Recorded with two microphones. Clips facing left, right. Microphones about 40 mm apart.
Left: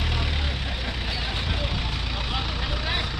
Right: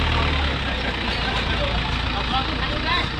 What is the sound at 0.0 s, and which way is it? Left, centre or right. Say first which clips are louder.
Vehicle: right 6 dB; right.